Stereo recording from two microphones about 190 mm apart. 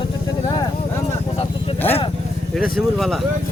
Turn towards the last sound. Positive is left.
turn(degrees=0)  # may be behind; listen again after turning